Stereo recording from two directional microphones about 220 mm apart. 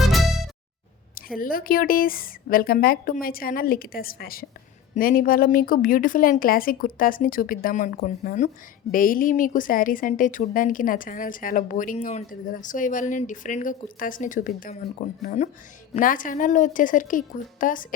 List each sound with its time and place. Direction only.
0.0 s music: centre (ahead or behind)
1.4 s speech: 40° left (ahead or behind)